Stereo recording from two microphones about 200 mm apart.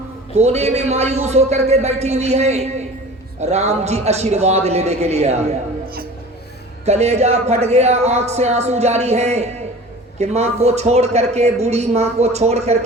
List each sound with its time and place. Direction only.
0.3 s speech: 35° right (ahead or behind)
6.8 s speech: 35° right (ahead or behind)